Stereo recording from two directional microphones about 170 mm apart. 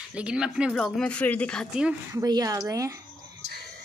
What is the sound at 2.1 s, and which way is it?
Speech, 20° right (ahead or behind).